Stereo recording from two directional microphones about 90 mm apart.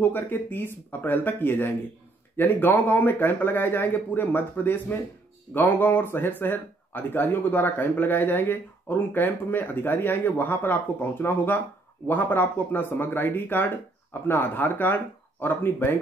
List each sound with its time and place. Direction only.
0.0 s speech: 20° left (ahead or behind)